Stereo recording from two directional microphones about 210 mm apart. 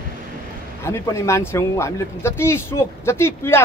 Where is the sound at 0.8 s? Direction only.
15° left (ahead or behind).